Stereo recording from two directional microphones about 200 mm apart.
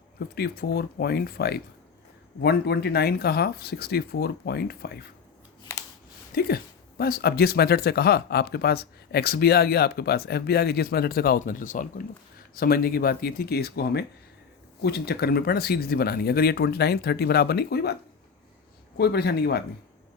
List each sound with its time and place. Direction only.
0.3 s speech: 50° left (ahead or behind)
6.3 s speech: 50° left (ahead or behind)
18.9 s speech: 55° left (ahead or behind)